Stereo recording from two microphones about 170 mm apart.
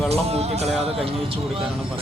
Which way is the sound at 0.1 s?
40° right (ahead or behind).